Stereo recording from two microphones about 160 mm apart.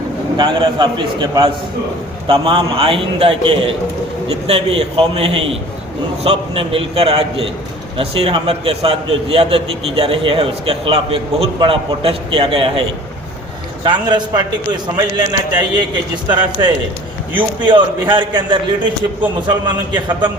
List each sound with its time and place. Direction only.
0.3 s a man's voice: 30° right (ahead or behind)
13.8 s a man's voice: 30° right (ahead or behind)